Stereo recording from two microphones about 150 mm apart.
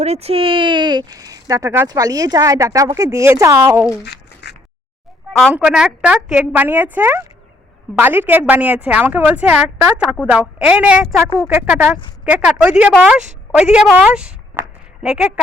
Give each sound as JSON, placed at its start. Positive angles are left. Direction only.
{"t": 0.0, "sound": "speech", "side_deg": -45}
{"t": 5.5, "sound": "a woman's voice", "side_deg": -5}